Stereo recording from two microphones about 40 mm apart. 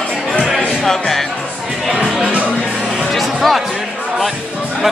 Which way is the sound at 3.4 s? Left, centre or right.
Centre.